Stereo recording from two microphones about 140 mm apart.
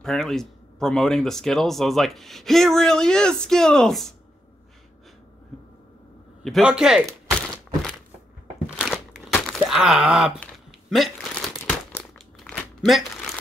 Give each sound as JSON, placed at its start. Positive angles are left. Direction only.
{"t": 0.0, "sound": "speech", "side_deg": 5}
{"t": 6.4, "sound": "speech", "side_deg": 0}
{"t": 8.8, "sound": "crumpling", "side_deg": 5}
{"t": 9.7, "sound": "groan", "side_deg": -5}
{"t": 10.9, "sound": "a sound", "side_deg": 0}
{"t": 11.5, "sound": "crumpling", "side_deg": 15}
{"t": 12.0, "sound": "crumpling", "side_deg": 5}